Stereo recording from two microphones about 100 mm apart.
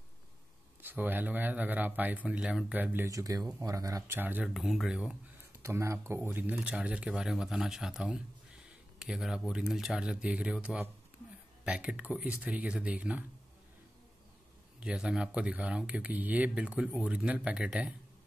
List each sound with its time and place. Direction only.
0.8 s speech: 20° right (ahead or behind)
2.7 s speech: 20° right (ahead or behind)
3.1 s speech: 35° right (ahead or behind)
4.2 s speech: 15° right (ahead or behind)
4.6 s speech: centre (ahead or behind)
5.6 s a man's voice: 30° right (ahead or behind); by 13.2 s 10° right (ahead or behind)
14.8 s speech: 10° right (ahead or behind)